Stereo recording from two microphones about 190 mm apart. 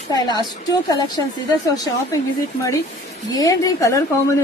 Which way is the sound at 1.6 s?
20° left (ahead or behind).